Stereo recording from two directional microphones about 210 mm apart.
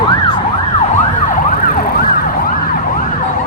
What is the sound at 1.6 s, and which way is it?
Emergency vehicle, 40° left (ahead or behind).